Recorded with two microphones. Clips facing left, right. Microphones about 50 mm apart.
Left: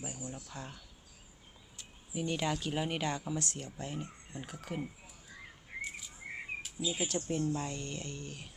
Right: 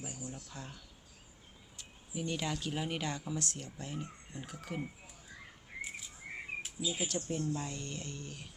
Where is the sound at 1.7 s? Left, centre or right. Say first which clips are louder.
Left 2 dB; centre.